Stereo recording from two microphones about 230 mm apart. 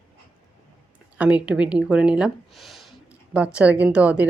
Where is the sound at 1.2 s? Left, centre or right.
Centre.